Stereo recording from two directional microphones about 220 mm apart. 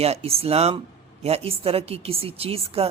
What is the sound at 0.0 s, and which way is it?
Speech, 30° right (ahead or behind).